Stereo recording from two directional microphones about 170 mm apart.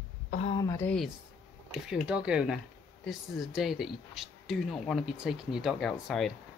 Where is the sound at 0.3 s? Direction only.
40° left (ahead or behind).